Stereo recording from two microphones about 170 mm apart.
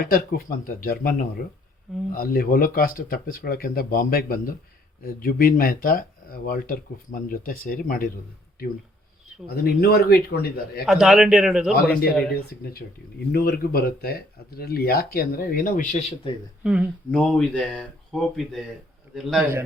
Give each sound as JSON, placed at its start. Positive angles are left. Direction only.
{"t": 0.0, "sound": "speech", "side_deg": 60}
{"t": 2.1, "sound": "speech", "side_deg": 60}
{"t": 9.5, "sound": "a man's voice", "side_deg": 70}
{"t": 10.8, "sound": "speech", "side_deg": 0}
{"t": 12.3, "sound": "speech", "side_deg": 65}
{"t": 16.6, "sound": "speech", "side_deg": -5}
{"t": 17.1, "sound": "speech", "side_deg": 5}